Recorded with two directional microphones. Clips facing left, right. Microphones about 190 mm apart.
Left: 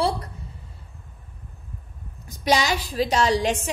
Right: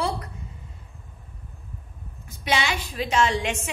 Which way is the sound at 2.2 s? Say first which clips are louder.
Left 4 dB; 40° left (ahead or behind).